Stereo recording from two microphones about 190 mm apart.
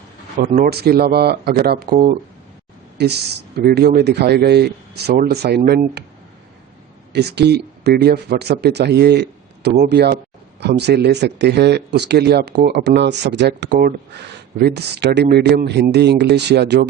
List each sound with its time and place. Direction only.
0.3 s speech: 50° right (ahead or behind)
3.0 s speech: 60° right (ahead or behind)
7.1 s speech: 60° right (ahead or behind)